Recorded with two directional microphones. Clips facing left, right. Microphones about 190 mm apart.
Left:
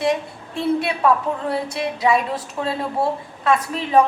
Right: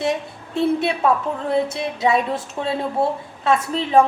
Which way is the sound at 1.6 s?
25° right (ahead or behind).